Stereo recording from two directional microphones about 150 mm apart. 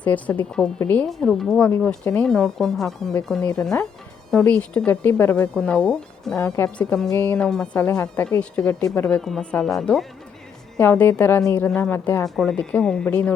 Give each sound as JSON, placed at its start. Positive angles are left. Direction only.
{"t": 0.0, "sound": "speech", "side_deg": 10}
{"t": 7.3, "sound": "speech", "side_deg": 5}
{"t": 10.8, "sound": "speech", "side_deg": 15}
{"t": 12.2, "sound": "speech", "side_deg": 5}